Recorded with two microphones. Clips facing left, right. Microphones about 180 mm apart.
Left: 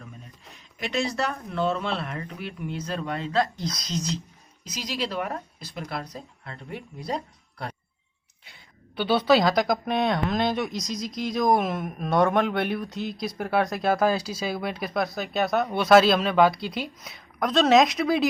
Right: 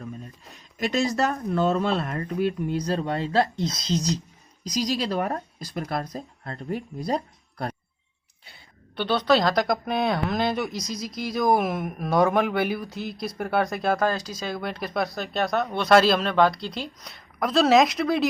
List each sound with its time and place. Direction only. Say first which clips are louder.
0.8 s speech: right 4 dB; 40° right (ahead or behind)
9.0 s speech: left 1 dB; 5° left (ahead or behind)